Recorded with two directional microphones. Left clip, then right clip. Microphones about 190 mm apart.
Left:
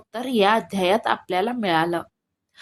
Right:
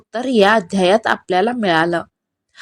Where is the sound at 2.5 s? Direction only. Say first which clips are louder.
Right 7 dB; 30° right (ahead or behind).